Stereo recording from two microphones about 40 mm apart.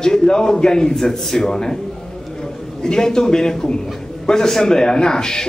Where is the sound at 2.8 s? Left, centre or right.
Centre.